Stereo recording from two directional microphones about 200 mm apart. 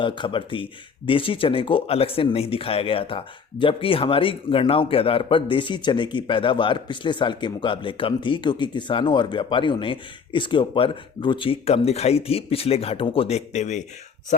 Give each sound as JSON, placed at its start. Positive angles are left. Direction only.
{"t": 0.0, "sound": "speech", "side_deg": 25}